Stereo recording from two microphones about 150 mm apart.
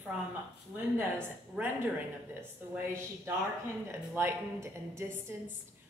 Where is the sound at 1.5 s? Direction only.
10° right (ahead or behind).